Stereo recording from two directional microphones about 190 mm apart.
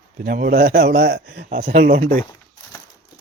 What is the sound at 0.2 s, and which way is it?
A man's voice, 50° right (ahead or behind).